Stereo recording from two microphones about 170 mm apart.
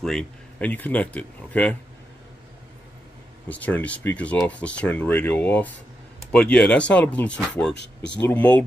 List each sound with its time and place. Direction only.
0.0 s speech: 5° left (ahead or behind)
3.4 s speech: 10° left (ahead or behind)
7.7 s speech: 90° left
8.2 s speech: 10° left (ahead or behind)